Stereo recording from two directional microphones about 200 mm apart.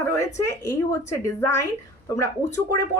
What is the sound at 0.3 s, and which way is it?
A woman's voice, 15° left (ahead or behind).